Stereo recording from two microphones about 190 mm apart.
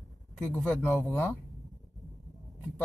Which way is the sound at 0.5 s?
10° left (ahead or behind).